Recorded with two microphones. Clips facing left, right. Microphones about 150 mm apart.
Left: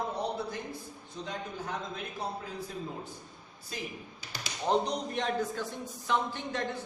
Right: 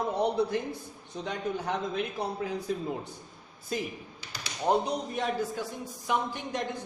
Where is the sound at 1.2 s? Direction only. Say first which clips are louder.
Right 6 dB; 70° right (ahead or behind).